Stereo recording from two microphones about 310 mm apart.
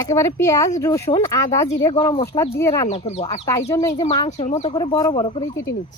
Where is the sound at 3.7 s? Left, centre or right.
Centre.